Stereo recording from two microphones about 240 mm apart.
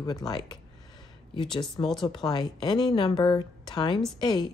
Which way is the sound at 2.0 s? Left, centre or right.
Centre.